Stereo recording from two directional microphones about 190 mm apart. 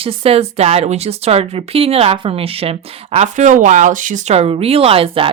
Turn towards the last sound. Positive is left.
turn(degrees=-30)  # may be behind; listen again after turning